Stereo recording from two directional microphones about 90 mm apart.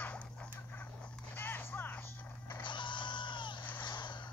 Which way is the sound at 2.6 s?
60° left (ahead or behind).